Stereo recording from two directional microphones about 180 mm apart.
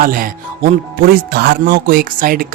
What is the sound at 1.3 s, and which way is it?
Music, 65° right (ahead or behind).